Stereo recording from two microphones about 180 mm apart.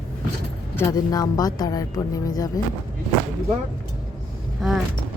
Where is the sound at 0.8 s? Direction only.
20° left (ahead or behind).